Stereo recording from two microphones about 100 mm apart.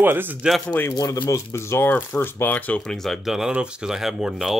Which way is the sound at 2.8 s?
5° left (ahead or behind).